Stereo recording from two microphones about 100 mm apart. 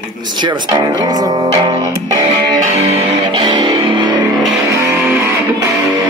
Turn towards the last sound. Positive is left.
turn(degrees=-30)  # may be behind; listen again after turning